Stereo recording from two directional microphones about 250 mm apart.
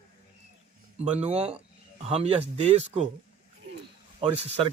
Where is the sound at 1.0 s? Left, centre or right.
Right.